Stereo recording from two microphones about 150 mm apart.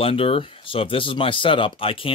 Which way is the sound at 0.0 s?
40° left (ahead or behind).